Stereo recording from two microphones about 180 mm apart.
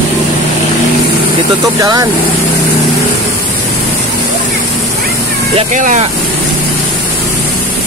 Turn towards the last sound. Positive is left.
turn(degrees=-45)  # may be behind; listen again after turning